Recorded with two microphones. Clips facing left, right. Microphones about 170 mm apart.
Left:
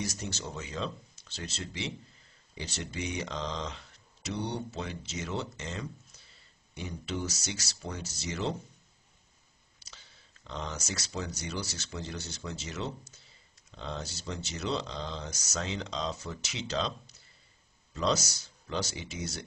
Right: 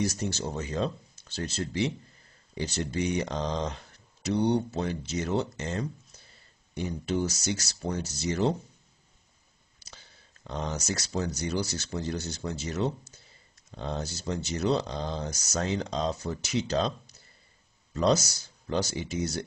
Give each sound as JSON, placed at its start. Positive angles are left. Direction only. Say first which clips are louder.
{"t": 0.2, "sound": "speech", "louder": "right 7 dB", "side_deg": -45}
{"t": 9.8, "sound": "speech", "louder": "right 4 dB", "side_deg": -45}
{"t": 17.9, "sound": "speech", "louder": "right 5 dB", "side_deg": -40}